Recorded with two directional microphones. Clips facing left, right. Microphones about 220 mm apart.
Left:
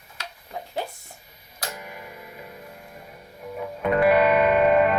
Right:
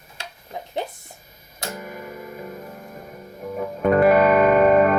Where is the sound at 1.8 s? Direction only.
45° right (ahead or behind).